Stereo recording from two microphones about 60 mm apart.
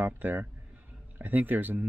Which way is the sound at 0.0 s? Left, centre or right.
Right.